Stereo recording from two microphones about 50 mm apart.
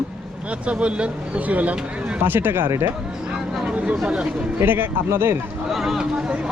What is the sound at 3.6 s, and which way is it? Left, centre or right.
Speech, right.